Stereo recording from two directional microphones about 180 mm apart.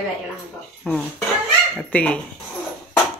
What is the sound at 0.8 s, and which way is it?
Speech, 5° left (ahead or behind).